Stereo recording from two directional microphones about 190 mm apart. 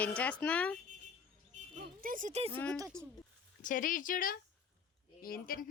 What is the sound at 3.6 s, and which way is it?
Speech, 45° left (ahead or behind).